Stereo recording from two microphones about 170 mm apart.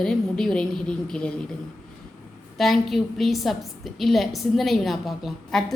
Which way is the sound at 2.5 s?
Centre (ahead or behind).